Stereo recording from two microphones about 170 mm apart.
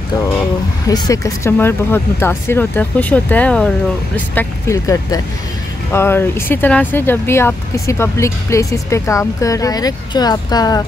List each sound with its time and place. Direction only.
0.8 s speech: 20° left (ahead or behind)
4.4 s speech: 15° left (ahead or behind)